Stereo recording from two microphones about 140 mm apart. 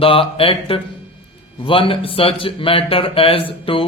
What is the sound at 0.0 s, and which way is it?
Speech, 40° left (ahead or behind).